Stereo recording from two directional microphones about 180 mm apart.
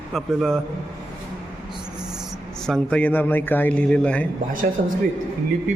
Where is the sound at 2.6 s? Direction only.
5° left (ahead or behind).